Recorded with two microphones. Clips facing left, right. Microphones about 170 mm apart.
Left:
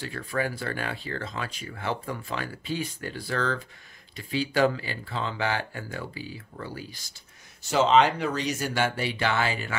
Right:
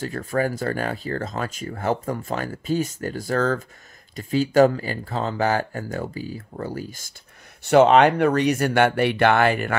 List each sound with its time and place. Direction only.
0.0 s speech: 40° right (ahead or behind)
7.6 s speech: 60° right (ahead or behind)